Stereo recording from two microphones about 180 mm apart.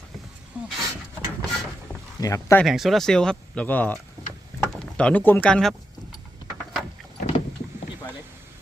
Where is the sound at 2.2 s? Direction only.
15° left (ahead or behind).